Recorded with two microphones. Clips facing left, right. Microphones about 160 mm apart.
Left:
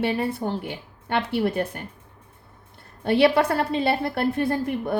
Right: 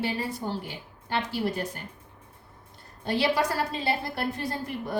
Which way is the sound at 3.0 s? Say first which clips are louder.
Left 7 dB; 60° left (ahead or behind).